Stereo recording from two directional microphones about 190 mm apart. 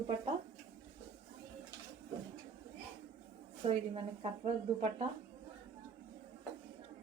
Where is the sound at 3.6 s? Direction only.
35° right (ahead or behind).